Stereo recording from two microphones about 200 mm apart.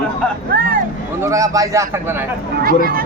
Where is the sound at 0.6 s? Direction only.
45° right (ahead or behind).